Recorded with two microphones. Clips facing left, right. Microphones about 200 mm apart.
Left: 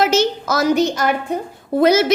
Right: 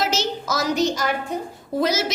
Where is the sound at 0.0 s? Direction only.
55° left (ahead or behind).